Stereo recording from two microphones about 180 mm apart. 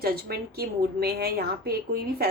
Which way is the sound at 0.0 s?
60° right (ahead or behind).